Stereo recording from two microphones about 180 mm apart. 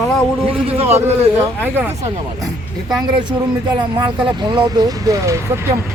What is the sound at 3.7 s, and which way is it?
Speech, 25° right (ahead or behind).